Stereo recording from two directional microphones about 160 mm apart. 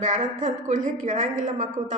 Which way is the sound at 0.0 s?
55° right (ahead or behind).